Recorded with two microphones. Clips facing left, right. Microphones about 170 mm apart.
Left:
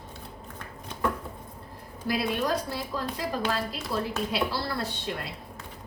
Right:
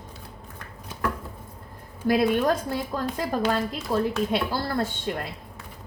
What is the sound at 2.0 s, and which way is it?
A woman's voice, 50° right (ahead or behind).